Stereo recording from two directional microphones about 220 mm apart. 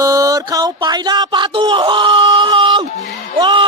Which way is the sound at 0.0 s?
15° right (ahead or behind).